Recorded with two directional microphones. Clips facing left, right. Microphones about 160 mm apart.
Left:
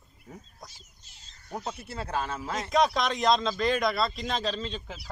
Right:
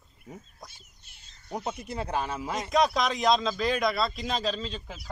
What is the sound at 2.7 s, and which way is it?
Speech, centre (ahead or behind).